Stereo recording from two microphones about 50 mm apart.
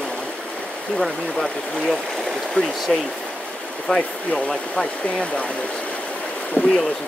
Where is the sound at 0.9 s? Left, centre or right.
Centre.